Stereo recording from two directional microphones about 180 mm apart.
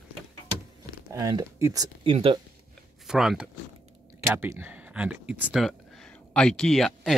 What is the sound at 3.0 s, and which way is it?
Speech, centre (ahead or behind).